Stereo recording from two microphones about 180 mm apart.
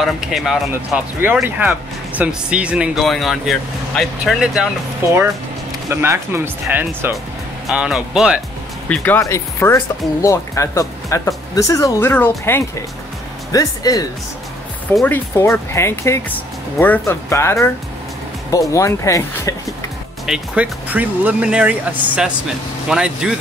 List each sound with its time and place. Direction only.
0.0 s speech: centre (ahead or behind)
5.0 s speech: 15° right (ahead or behind)
8.8 s speech: 10° left (ahead or behind)
20.2 s speech: 5° right (ahead or behind)